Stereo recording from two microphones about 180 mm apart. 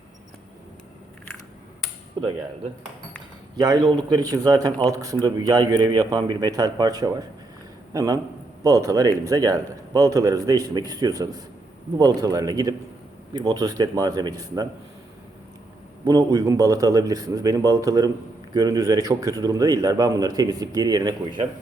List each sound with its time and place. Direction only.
2.2 s speech: 25° right (ahead or behind)
3.6 s speech: 20° right (ahead or behind)
16.0 s speech: 20° right (ahead or behind)